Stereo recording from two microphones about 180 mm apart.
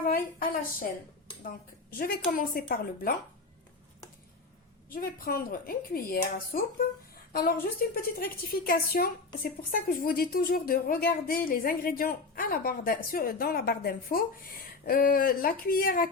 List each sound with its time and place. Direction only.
0.0 s a woman's voice: 55° left (ahead or behind)
1.9 s a woman's voice: 55° left (ahead or behind)
4.9 s a woman's voice: 50° left (ahead or behind)